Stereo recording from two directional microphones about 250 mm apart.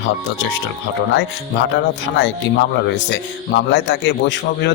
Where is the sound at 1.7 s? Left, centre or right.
Left.